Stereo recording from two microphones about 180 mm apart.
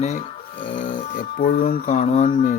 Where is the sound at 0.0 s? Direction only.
40° left (ahead or behind).